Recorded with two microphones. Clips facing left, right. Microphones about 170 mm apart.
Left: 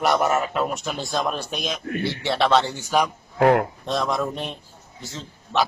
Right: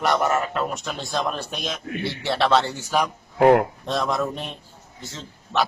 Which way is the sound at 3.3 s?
20° right (ahead or behind).